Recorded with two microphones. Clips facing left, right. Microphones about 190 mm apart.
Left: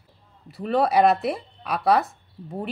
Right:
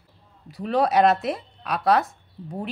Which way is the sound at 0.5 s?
Centre (ahead or behind).